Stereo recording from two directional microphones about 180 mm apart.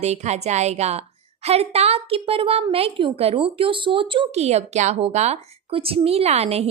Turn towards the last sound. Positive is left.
turn(degrees=-35)  # may be behind; listen again after turning